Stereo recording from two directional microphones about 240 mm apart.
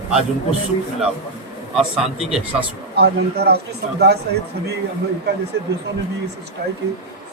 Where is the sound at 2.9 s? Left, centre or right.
Right.